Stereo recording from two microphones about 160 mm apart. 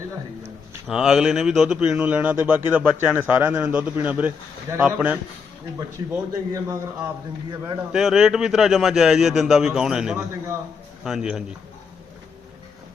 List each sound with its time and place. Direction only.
0.9 s a man's voice: 5° right (ahead or behind)
6.1 s a man's voice: 20° right (ahead or behind)
7.9 s speech: centre (ahead or behind)